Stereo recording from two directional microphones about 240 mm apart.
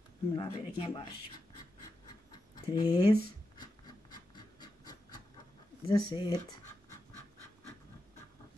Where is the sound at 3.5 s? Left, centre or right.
Centre.